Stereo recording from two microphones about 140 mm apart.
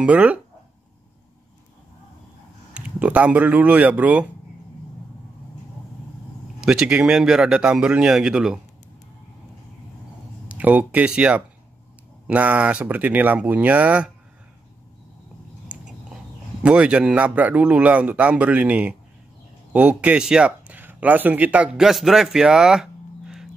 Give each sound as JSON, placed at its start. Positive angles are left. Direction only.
{"t": 0.0, "sound": "a man's voice", "side_deg": -10}
{"t": 2.7, "sound": "a man's voice", "side_deg": -10}
{"t": 6.6, "sound": "speech", "side_deg": -5}
{"t": 10.5, "sound": "a man's voice", "side_deg": -10}
{"t": 16.6, "sound": "a man's voice", "side_deg": -10}